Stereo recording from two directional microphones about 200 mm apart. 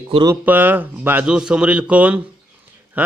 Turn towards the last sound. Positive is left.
turn(degrees=-10)  # may be behind; listen again after turning